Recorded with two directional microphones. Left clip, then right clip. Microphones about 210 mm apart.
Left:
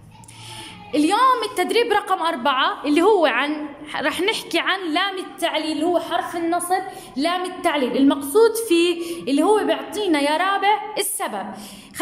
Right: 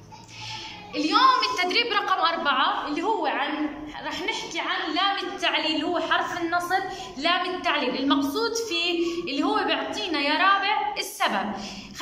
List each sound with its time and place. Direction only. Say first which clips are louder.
0.9 s a woman's voice: left 3 dB; 40° left (ahead or behind)